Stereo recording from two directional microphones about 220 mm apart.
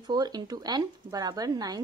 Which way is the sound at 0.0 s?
20° right (ahead or behind).